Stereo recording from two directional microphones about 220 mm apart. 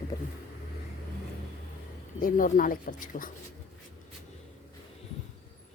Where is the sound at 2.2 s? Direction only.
40° left (ahead or behind).